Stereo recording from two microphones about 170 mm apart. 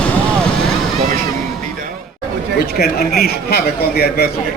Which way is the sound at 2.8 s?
65° left (ahead or behind).